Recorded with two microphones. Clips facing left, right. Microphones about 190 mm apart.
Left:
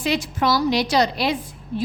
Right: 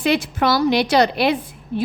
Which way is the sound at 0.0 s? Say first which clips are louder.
Right 3 dB; 60° right (ahead or behind).